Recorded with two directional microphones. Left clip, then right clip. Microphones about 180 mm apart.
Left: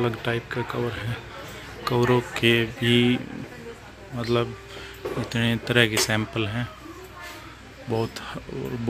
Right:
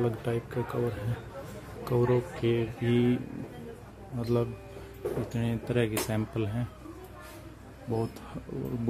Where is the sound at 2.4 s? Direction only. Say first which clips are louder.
Left 8 dB; 5° left (ahead or behind).